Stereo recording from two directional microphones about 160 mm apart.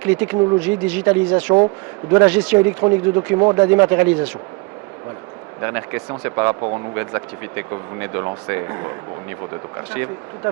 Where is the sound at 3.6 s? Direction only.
10° right (ahead or behind).